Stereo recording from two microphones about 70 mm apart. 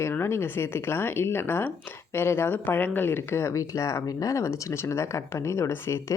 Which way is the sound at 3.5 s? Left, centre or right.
Left.